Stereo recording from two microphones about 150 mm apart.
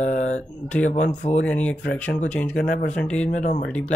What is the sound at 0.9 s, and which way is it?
Speech, 50° left (ahead or behind).